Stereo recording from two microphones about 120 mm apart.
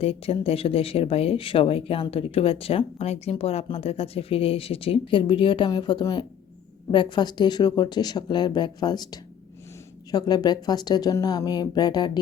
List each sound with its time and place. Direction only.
0.0 s speech: 55° left (ahead or behind); by 12.2 s 35° left (ahead or behind)